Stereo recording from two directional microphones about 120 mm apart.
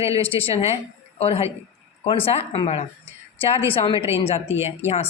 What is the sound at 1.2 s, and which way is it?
A woman's voice, 55° left (ahead or behind).